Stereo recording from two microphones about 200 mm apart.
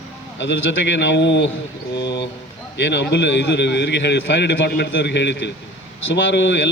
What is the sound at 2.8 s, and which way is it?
A man's voice, 60° left (ahead or behind).